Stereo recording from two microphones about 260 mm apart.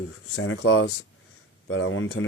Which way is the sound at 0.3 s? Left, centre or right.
Left.